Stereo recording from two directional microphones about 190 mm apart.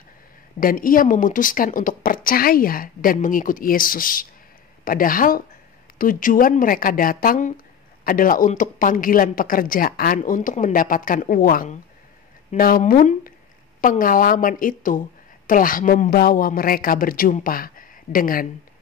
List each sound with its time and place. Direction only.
0.6 s a woman's voice: 45° left (ahead or behind)